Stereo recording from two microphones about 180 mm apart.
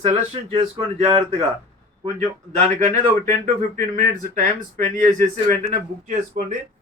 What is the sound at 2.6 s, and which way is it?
Speech, 40° right (ahead or behind).